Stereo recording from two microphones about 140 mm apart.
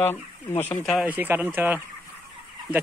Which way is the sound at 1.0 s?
15° right (ahead or behind).